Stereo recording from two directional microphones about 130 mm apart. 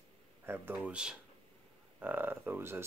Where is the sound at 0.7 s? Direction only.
5° right (ahead or behind).